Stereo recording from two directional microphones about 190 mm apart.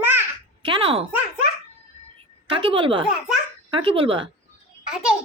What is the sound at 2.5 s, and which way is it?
A woman's voice, 30° right (ahead or behind).